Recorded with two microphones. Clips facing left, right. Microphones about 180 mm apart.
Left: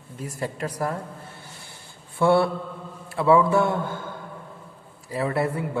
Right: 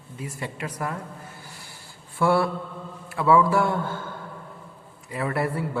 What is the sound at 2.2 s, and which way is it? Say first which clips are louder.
A man's voice: left 2 dB; 25° left (ahead or behind).